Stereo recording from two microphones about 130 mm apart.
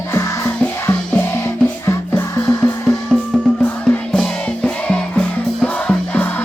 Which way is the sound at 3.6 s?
5° left (ahead or behind).